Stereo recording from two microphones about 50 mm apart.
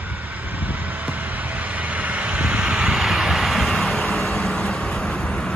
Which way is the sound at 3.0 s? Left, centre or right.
Centre.